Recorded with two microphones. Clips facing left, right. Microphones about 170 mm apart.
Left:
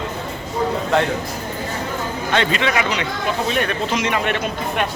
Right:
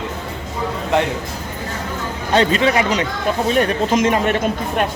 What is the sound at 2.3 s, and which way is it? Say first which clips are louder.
Speech: right 5 dB; 40° right (ahead or behind).